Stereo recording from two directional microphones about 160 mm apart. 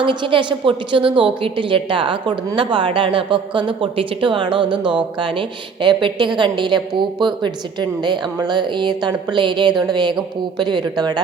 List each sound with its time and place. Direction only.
0.0 s a woman's voice: 30° right (ahead or behind)